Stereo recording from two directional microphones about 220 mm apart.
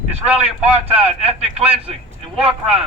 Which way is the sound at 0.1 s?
25° right (ahead or behind).